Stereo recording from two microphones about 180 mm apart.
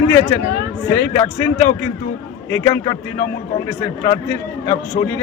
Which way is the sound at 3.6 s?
15° left (ahead or behind).